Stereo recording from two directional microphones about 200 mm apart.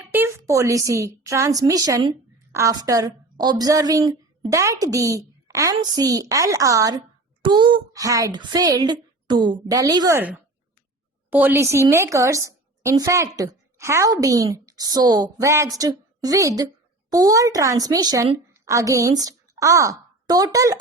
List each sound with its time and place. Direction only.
0.1 s a woman's voice: 10° right (ahead or behind)